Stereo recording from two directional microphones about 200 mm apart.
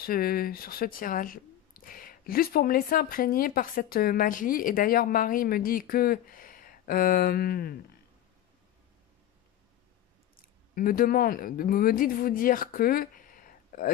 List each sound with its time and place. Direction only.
0.0 s speech: 50° left (ahead or behind)
10.3 s speech: 45° left (ahead or behind)